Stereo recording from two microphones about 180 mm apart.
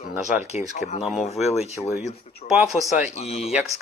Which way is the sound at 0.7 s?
40° left (ahead or behind).